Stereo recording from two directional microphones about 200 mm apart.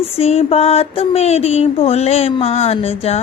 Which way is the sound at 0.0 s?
30° left (ahead or behind).